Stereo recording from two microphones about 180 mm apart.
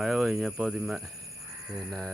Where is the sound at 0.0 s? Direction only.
Centre (ahead or behind).